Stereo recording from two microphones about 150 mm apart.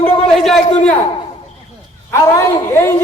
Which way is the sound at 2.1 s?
15° left (ahead or behind).